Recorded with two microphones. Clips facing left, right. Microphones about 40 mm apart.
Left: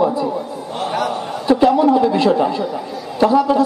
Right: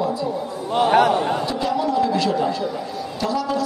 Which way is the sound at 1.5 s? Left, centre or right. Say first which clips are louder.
Left 9 dB; left.